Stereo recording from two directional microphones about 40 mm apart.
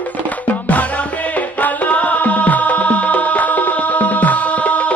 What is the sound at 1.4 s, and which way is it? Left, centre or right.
Music, left.